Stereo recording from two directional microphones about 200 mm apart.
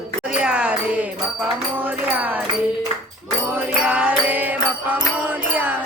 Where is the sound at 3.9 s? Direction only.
5° right (ahead or behind).